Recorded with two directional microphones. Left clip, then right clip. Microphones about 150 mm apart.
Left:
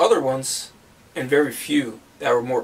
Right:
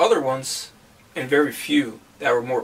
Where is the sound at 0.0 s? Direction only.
5° left (ahead or behind).